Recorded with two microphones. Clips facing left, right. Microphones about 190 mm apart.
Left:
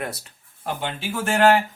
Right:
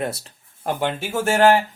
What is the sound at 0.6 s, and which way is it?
Speech, 55° right (ahead or behind).